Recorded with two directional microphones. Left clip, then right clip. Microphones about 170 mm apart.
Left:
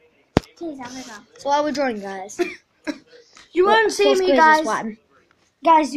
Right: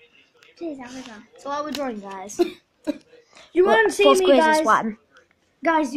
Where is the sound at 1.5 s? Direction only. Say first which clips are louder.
Left 7 dB; 25° left (ahead or behind).